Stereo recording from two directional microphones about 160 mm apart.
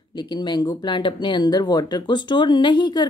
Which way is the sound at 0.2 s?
25° left (ahead or behind).